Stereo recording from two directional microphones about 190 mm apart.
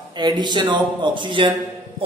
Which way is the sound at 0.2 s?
25° right (ahead or behind).